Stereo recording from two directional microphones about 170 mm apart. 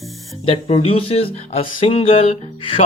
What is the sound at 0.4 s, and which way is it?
Music, 35° left (ahead or behind).